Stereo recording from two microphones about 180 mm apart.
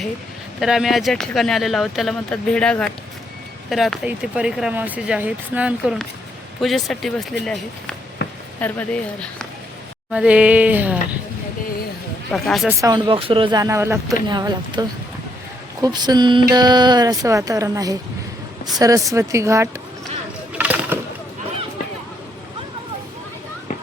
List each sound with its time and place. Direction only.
0.6 s speech: centre (ahead or behind)
8.2 s a sound: 75° left (ahead or behind)
8.6 s speech: 10° left (ahead or behind)
10.1 s speech: 5° right (ahead or behind)
12.3 s speech: centre (ahead or behind)
12.6 s a man's voice: 20° right (ahead or behind)
20.5 s a sound: 10° right (ahead or behind)